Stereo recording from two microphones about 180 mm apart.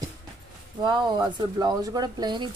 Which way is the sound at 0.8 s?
25° right (ahead or behind).